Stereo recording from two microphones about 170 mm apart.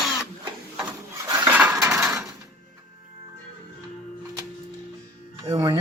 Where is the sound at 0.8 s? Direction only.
10° right (ahead or behind).